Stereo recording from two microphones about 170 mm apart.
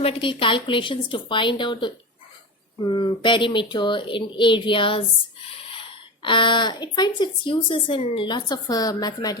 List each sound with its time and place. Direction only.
0.0 s speech: 30° left (ahead or behind)